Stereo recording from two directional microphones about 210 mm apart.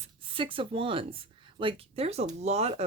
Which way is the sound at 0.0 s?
25° right (ahead or behind).